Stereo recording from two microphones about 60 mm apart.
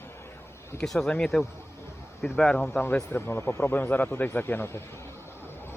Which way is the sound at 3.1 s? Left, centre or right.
Left.